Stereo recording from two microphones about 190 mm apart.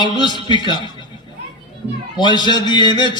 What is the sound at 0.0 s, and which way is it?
Speech, 25° left (ahead or behind).